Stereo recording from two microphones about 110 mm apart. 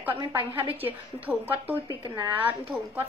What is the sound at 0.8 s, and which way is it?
Speech, 15° right (ahead or behind).